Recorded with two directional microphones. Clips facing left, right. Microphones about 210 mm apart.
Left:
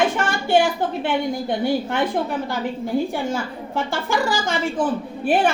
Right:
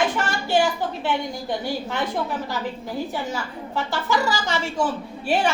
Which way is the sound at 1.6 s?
55° left (ahead or behind).